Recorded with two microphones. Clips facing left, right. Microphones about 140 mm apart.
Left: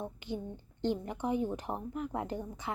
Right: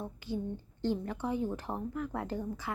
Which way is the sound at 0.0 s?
20° left (ahead or behind).